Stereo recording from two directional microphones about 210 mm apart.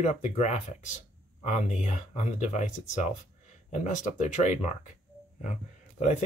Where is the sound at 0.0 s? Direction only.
35° left (ahead or behind).